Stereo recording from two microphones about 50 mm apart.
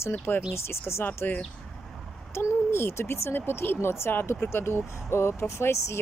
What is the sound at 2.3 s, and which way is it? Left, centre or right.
Speech, left.